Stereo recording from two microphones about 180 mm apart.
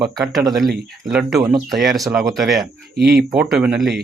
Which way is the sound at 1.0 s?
Centre (ahead or behind).